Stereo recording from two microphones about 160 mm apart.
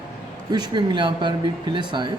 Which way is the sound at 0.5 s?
25° right (ahead or behind).